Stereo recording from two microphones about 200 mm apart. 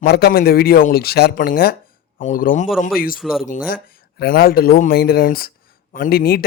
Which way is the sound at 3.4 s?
40° left (ahead or behind).